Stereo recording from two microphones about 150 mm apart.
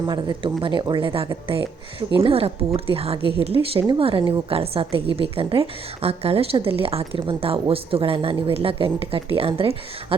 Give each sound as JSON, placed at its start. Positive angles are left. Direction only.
{"t": 0.0, "sound": "a woman's voice", "side_deg": -30}